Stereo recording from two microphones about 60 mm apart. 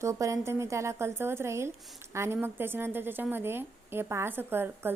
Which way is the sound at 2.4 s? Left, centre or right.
Right.